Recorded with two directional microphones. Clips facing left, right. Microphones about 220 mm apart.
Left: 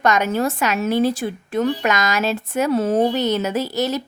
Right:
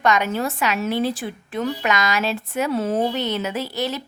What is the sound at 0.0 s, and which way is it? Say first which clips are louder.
A woman's voice: left 2 dB; 45° left (ahead or behind).